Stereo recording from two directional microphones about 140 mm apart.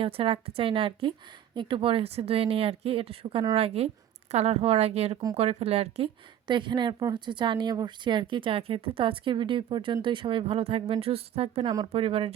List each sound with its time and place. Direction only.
0.0 s a woman's voice: 40° right (ahead or behind)
6.5 s a woman's voice: 35° right (ahead or behind)
11.6 s speech: 30° right (ahead or behind)
11.9 s a woman's voice: 45° right (ahead or behind)